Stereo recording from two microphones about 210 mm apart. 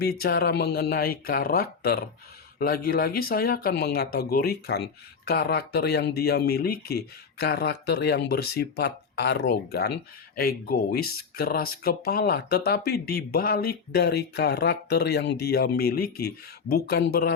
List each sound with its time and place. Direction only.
0.2 s speech: 45° left (ahead or behind)